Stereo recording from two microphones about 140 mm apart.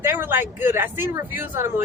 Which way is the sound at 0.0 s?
15° right (ahead or behind).